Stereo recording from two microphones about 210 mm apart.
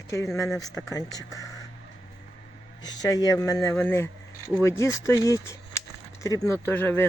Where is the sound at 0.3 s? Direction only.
15° left (ahead or behind).